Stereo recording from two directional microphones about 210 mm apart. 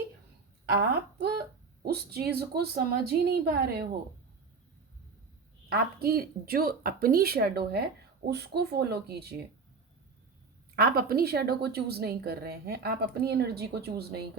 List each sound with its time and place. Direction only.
0.6 s a woman's voice: 50° right (ahead or behind)
5.6 s a woman's voice: 45° right (ahead or behind)
10.8 s a woman's voice: 45° right (ahead or behind)